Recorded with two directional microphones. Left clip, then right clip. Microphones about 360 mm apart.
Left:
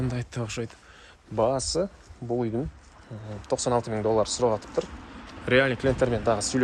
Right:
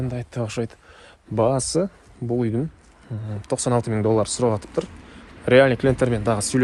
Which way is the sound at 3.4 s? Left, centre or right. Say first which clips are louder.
Right 3 dB; centre.